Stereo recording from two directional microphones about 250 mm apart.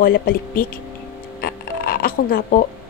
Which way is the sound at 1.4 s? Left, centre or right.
Left.